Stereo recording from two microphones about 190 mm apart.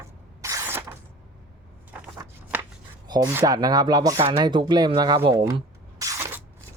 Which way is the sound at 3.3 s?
15° right (ahead or behind).